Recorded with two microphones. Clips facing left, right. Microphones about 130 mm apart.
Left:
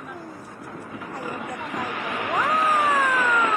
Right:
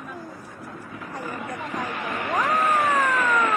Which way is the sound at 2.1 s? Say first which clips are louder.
Even; 15° left (ahead or behind).